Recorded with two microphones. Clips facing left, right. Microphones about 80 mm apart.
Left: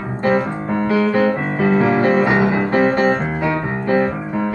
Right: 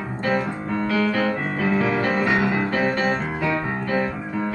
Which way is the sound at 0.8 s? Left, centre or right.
Left.